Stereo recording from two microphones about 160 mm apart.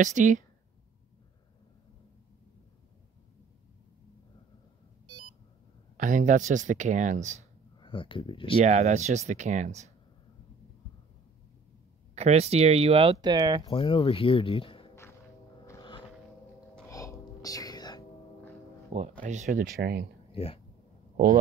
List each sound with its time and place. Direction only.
0.0 s speech: 50° right (ahead or behind)
5.9 s speech: 55° right (ahead or behind)
7.8 s speech: 30° left (ahead or behind)
8.6 s speech: 45° right (ahead or behind)
12.2 s speech: 40° right (ahead or behind); by 13.7 s 25° right (ahead or behind)
13.7 s speech: 30° left (ahead or behind)
15.6 s a sound: 20° left (ahead or behind)
16.8 s whispering: 20° left (ahead or behind)
18.9 s speech: 45° right (ahead or behind); by 20.1 s 85° right
20.2 s a sound: 35° left (ahead or behind)